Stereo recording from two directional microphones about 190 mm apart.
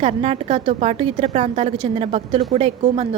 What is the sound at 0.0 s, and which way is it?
A woman's voice, 35° right (ahead or behind).